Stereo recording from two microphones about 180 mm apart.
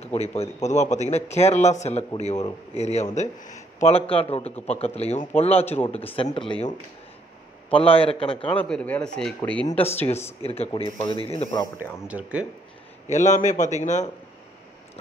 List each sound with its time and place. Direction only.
0.0 s a man's voice: 35° left (ahead or behind)
7.7 s a man's voice: 30° left (ahead or behind)
8.5 s speech: 5° left (ahead or behind)
10.4 s a man's voice: 35° left (ahead or behind)
11.6 s speech: 10° right (ahead or behind)
13.1 s a man's voice: 40° left (ahead or behind)